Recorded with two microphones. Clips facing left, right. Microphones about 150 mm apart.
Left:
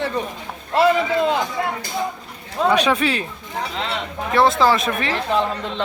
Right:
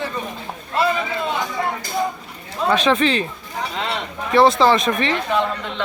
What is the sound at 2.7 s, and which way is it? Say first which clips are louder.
Speech: right 1 dB; 10° left (ahead or behind).